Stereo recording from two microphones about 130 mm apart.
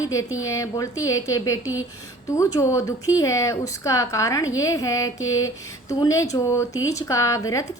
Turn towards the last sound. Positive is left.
turn(degrees=25)  # may be behind; listen again after turning